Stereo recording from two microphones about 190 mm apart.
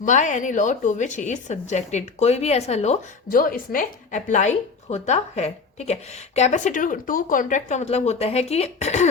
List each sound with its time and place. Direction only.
0.0 s speech: 40° left (ahead or behind)
3.3 s speech: 50° left (ahead or behind)